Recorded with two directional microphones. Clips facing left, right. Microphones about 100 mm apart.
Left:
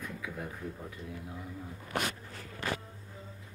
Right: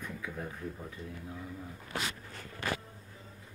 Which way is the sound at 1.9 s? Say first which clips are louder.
Left 4 dB; 65° left (ahead or behind).